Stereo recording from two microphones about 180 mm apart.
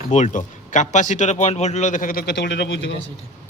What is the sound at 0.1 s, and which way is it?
Speech, 45° left (ahead or behind).